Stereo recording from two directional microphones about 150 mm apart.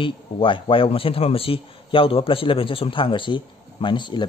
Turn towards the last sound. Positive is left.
turn(degrees=30)  # may be behind; listen again after turning